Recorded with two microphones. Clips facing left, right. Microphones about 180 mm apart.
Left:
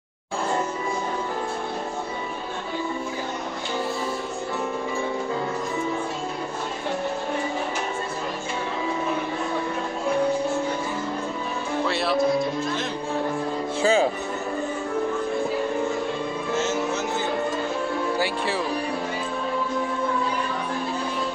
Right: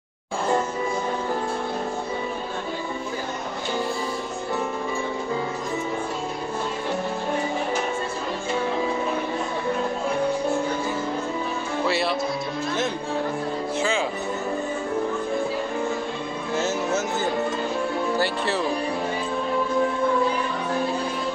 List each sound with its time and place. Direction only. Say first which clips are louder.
11.9 s music: right 1 dB; centre (ahead or behind)
13.7 s music: left 6 dB; 40° left (ahead or behind)